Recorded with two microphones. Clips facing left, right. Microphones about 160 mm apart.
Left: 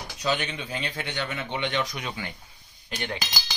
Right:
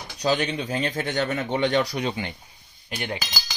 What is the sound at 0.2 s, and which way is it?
A man's voice, 40° right (ahead or behind).